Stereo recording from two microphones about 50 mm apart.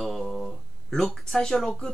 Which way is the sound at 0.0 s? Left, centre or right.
Centre.